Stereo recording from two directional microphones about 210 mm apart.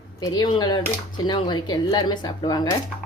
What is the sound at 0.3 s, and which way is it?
Speech, 20° left (ahead or behind).